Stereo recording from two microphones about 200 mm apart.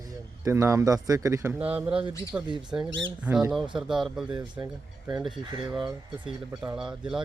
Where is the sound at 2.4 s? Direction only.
20° right (ahead or behind).